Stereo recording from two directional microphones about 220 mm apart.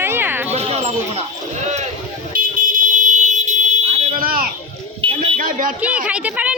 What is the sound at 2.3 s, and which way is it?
Vehicle, 40° right (ahead or behind).